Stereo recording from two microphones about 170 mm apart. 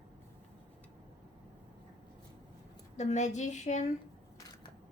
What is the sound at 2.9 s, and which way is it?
Speech, 45° left (ahead or behind).